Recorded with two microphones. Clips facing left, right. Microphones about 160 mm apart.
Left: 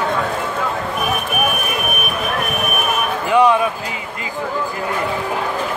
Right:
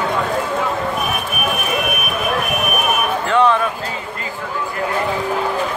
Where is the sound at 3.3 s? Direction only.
10° left (ahead or behind).